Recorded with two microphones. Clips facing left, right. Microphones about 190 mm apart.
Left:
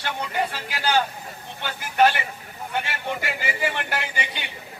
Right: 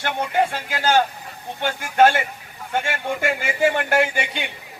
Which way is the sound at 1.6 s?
50° right (ahead or behind).